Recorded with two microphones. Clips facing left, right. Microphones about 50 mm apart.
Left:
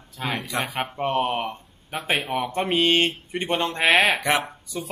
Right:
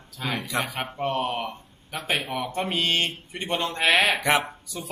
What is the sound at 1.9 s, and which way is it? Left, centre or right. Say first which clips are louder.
A man's voice: left 3 dB; left.